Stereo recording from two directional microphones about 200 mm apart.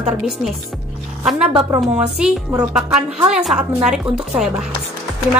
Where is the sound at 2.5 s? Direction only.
15° right (ahead or behind).